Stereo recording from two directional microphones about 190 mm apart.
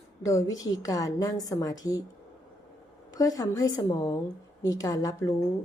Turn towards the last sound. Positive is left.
turn(degrees=20)  # may be behind; listen again after turning